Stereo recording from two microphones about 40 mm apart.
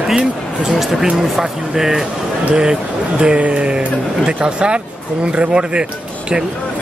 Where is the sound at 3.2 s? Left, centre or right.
Right.